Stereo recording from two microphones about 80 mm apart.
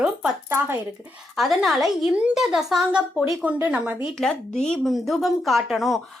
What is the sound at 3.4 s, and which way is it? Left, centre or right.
Speech, centre.